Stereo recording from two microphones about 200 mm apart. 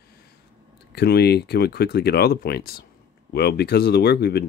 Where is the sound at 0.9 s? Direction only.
55° left (ahead or behind).